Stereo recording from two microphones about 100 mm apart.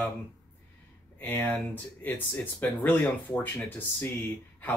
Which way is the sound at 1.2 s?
20° left (ahead or behind).